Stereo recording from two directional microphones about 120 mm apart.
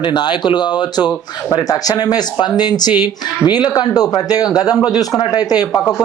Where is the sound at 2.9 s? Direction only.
15° right (ahead or behind).